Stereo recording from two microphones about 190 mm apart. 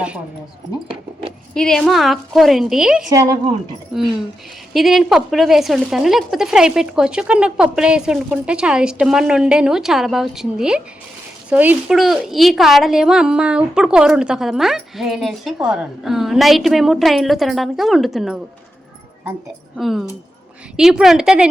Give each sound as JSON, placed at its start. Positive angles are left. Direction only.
{"t": 1.5, "sound": "a woman's voice", "side_deg": 5}
{"t": 3.1, "sound": "a woman's voice", "side_deg": -15}
{"t": 3.9, "sound": "a woman's voice", "side_deg": 0}
{"t": 19.7, "sound": "a woman's voice", "side_deg": 0}